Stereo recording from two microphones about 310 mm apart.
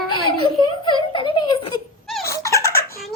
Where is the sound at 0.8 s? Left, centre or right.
Centre.